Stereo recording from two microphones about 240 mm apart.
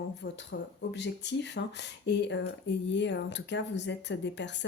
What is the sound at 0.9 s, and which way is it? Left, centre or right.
Speech, left.